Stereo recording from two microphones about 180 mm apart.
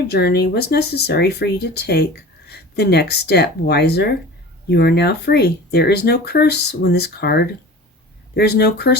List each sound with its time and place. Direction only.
0.1 s speech: 65° left (ahead or behind)